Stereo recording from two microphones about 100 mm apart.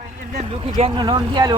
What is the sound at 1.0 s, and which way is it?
Speech, 45° right (ahead or behind).